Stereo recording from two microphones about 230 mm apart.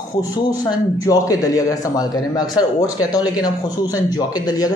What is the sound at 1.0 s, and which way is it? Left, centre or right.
Speech, centre.